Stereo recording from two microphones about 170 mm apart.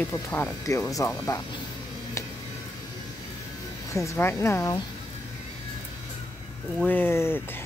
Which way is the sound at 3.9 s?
15° left (ahead or behind).